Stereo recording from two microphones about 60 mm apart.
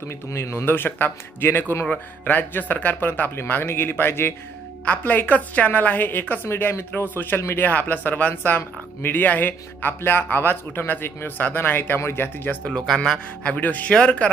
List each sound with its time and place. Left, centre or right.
0.3 s speech: left
0.5 s speech: left
4.9 s speech: left
13.4 s speech: left
13.9 s speech: centre